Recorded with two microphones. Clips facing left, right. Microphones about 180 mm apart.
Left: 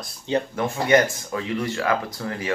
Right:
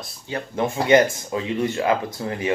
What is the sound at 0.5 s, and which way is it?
A man's voice, 20° right (ahead or behind).